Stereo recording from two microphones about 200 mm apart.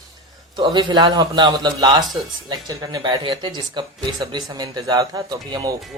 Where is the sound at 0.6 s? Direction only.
20° right (ahead or behind).